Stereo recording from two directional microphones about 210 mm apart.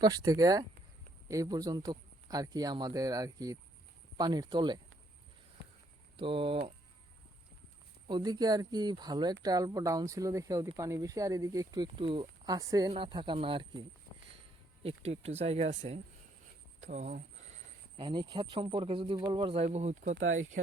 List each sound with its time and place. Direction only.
0.0 s a man's voice: 20° right (ahead or behind)
6.1 s a man's voice: 25° right (ahead or behind)
8.0 s a man's voice: 20° right (ahead or behind)
14.8 s speech: 30° right (ahead or behind)